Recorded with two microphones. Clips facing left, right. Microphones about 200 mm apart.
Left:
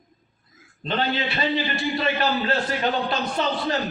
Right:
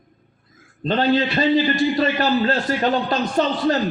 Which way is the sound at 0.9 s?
40° right (ahead or behind).